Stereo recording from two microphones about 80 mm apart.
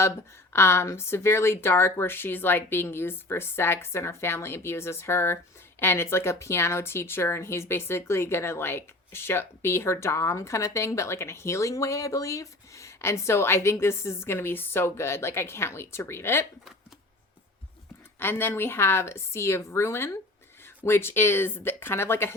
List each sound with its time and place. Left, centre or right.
0.0 s speech: left
18.2 s speech: left